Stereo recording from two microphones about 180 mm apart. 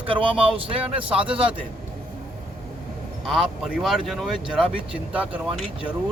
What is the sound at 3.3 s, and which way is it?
Speech, centre (ahead or behind).